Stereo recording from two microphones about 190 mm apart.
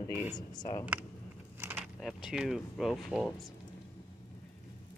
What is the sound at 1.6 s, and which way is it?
Keys jangling, 10° right (ahead or behind).